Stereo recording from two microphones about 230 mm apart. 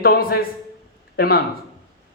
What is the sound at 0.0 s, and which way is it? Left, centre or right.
Speech, left.